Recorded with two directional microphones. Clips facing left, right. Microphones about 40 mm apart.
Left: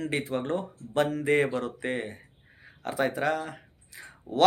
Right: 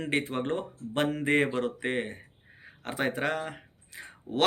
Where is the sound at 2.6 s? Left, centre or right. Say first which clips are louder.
Left 3 dB; right.